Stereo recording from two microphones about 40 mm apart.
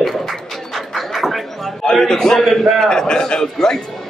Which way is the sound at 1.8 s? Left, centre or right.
Centre.